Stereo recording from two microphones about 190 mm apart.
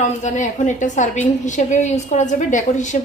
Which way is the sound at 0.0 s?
40° left (ahead or behind).